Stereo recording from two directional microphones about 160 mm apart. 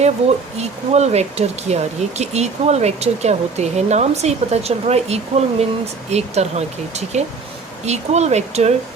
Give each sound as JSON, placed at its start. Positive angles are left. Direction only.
{"t": 0.0, "sound": "speech", "side_deg": -45}